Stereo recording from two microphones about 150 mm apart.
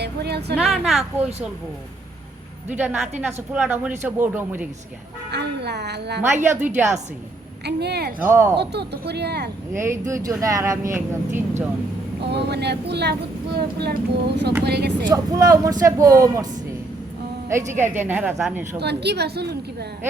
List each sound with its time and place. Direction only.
0.0 s a sound: 90° right
0.5 s a woman's voice: centre (ahead or behind)
2.6 s speech: 10° right (ahead or behind)
5.3 s speech: 90° right
6.3 s speech: 15° right (ahead or behind)
7.6 s speech: 90° right
8.2 s speech: 15° right (ahead or behind)
8.5 s speech: 90° right
9.7 s speech: 15° right (ahead or behind)
12.2 s speech: 90° right
15.1 s speech: 25° right (ahead or behind)
17.7 s speech: 15° right (ahead or behind)
18.8 s speech: 90° right